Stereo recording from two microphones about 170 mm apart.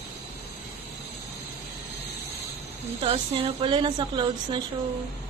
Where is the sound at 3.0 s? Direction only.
30° right (ahead or behind).